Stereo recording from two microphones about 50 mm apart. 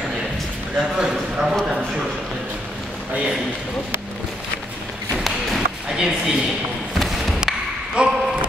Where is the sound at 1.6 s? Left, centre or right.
Centre.